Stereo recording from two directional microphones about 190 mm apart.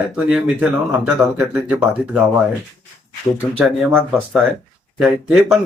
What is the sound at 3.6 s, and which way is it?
Speech, centre (ahead or behind).